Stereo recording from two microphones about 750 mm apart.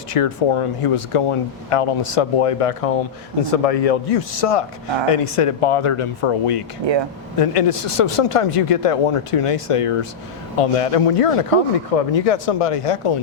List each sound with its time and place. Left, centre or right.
0.1 s speech: left